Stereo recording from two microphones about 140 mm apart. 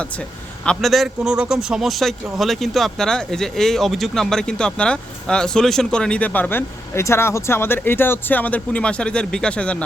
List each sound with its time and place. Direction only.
0.6 s a man's voice: 5° left (ahead or behind)